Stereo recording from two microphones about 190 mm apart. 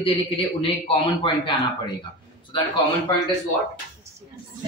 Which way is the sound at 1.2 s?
25° left (ahead or behind).